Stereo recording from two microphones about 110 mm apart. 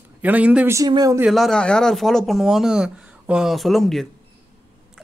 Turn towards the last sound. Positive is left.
turn(degrees=0)  # may be behind; listen again after turning